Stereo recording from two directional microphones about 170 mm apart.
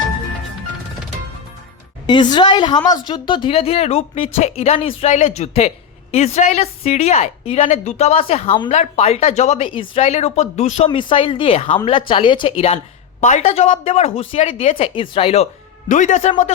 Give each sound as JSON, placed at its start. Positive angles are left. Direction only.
{"t": 2.0, "sound": "a woman's voice", "side_deg": 25}
{"t": 10.8, "sound": "a woman's voice", "side_deg": 30}
{"t": 13.2, "sound": "a woman's voice", "side_deg": 40}
{"t": 15.9, "sound": "a man's voice", "side_deg": 50}